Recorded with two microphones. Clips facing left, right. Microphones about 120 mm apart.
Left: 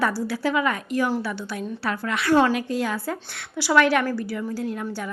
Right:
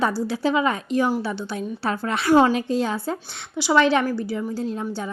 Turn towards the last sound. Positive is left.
turn(degrees=-25)  # may be behind; listen again after turning